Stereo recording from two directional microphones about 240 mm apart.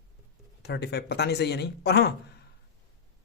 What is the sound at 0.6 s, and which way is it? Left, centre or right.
Speech, left.